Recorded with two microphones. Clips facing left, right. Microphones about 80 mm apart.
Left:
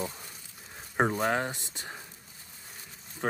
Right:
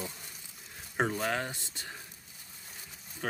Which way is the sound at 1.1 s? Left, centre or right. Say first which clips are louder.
Left 4 dB; left.